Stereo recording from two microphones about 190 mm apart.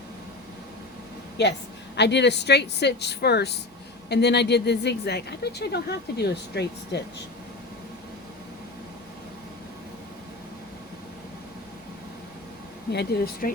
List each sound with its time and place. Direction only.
1.4 s speech: 65° left (ahead or behind)
12.9 s speech: 60° left (ahead or behind)